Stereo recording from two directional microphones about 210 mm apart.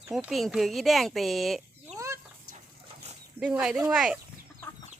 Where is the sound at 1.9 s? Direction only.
15° right (ahead or behind).